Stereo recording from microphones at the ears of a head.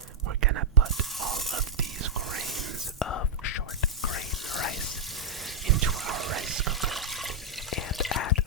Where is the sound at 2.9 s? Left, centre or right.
Left.